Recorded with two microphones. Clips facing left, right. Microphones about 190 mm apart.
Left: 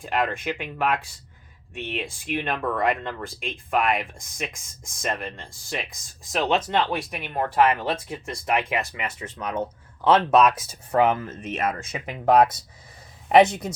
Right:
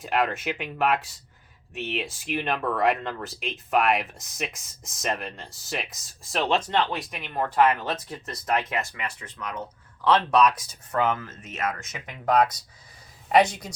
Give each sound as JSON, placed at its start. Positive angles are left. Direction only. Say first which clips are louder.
{"t": 0.0, "sound": "speech", "louder": "even", "side_deg": -5}